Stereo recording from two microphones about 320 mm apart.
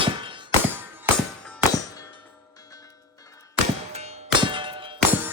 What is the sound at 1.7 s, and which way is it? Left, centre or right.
Clang, centre.